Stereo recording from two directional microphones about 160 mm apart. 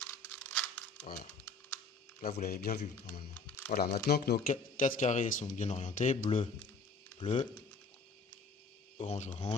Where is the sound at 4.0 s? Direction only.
90° left; by 6.3 s 50° left (ahead or behind).